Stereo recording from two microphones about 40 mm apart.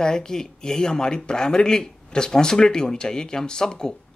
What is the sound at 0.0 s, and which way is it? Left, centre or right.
Speech, centre.